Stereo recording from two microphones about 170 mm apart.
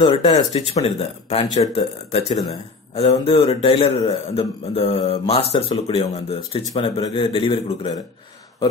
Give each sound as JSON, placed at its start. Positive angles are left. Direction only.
{"t": 0.0, "sound": "speech", "side_deg": 25}
{"t": 0.5, "sound": "a man's voice", "side_deg": 40}